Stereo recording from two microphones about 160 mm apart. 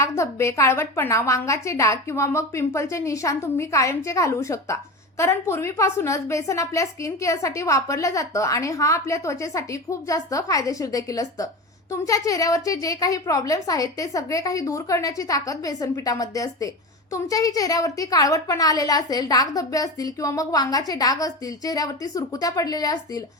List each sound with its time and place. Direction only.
0.0 s a woman's voice: 15° left (ahead or behind)